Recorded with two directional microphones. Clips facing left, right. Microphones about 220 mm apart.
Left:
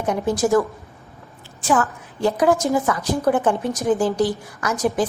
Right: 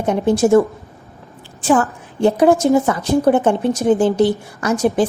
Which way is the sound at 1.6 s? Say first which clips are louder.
Right 5 dB; 30° right (ahead or behind).